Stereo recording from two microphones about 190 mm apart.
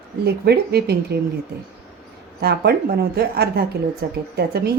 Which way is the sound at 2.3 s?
55° right (ahead or behind).